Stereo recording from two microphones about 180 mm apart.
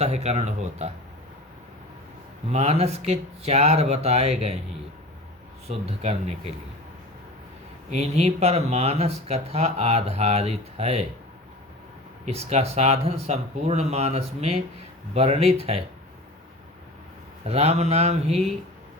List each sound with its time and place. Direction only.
0.0 s speech: 35° right (ahead or behind)
2.5 s speech: 35° right (ahead or behind)
5.6 s speech: 35° right (ahead or behind)
7.9 s speech: 35° right (ahead or behind)
12.2 s speech: 35° right (ahead or behind)
17.4 s speech: 35° right (ahead or behind)